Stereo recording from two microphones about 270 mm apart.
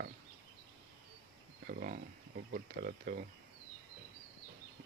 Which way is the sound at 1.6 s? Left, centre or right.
Right.